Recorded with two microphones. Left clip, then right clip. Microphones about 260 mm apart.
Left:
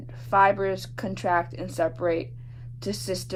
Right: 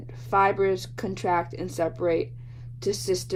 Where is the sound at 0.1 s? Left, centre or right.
Right.